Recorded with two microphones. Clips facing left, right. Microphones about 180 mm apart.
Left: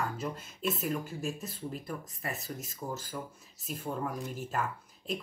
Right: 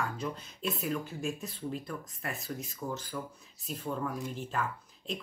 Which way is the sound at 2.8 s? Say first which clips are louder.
Even; 15° left (ahead or behind).